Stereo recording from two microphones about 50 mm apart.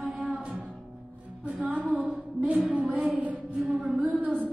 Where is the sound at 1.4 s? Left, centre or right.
Right.